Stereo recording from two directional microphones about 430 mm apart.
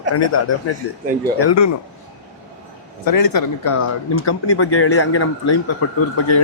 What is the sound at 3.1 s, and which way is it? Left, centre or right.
Speech, left.